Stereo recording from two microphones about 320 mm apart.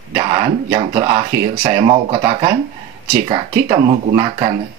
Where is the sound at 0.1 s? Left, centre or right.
Centre.